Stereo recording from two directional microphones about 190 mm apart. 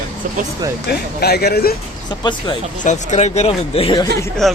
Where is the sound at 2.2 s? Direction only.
25° left (ahead or behind).